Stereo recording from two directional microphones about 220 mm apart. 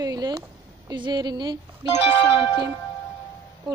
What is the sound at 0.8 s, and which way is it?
Speech, 20° right (ahead or behind).